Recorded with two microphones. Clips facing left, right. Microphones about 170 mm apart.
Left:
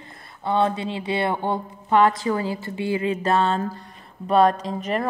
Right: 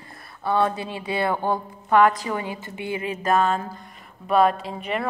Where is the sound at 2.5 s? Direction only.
20° right (ahead or behind).